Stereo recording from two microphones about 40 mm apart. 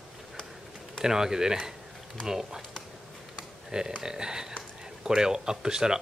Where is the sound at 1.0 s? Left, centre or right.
Centre.